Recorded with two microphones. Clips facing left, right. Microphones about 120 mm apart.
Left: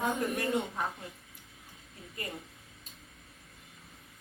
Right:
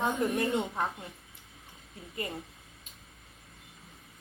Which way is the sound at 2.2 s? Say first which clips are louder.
Right 4 dB; 20° right (ahead or behind).